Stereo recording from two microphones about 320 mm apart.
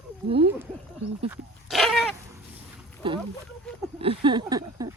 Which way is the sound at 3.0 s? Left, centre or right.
Centre.